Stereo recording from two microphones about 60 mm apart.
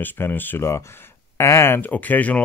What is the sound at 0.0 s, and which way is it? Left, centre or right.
Speech, left.